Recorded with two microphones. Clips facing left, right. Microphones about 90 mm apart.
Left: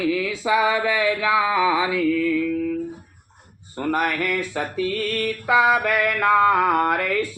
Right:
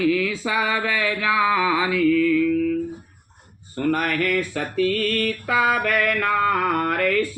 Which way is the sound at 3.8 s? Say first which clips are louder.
Right 1 dB; 15° left (ahead or behind).